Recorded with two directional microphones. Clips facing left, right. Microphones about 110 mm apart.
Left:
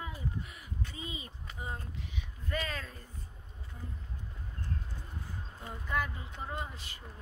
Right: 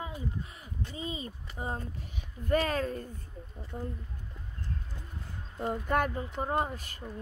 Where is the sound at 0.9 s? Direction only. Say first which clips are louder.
Right 6 dB; 35° right (ahead or behind).